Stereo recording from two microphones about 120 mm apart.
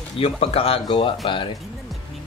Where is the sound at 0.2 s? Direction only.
55° left (ahead or behind).